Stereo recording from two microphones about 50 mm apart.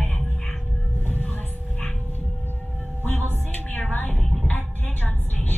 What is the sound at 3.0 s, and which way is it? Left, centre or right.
A woman's voice, left.